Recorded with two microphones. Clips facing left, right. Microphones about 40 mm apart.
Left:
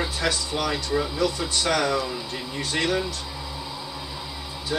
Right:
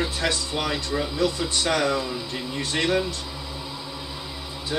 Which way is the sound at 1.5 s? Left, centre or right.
Right.